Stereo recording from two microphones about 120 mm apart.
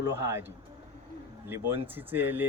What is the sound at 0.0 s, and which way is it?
Speech, 20° right (ahead or behind).